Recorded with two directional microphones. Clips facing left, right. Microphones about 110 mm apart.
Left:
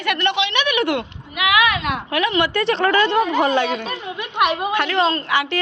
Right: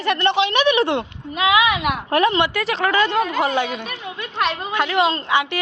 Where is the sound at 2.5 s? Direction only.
5° right (ahead or behind).